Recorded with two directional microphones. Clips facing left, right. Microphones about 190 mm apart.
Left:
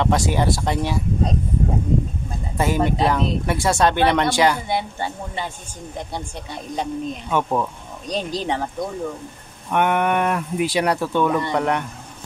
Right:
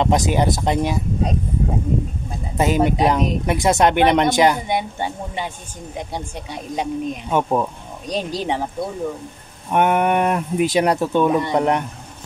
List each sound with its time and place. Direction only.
0.0 s speech: 20° right (ahead or behind)
2.5 s speech: 20° right (ahead or behind)
9.7 s speech: 20° right (ahead or behind)
11.5 s speech: 25° right (ahead or behind)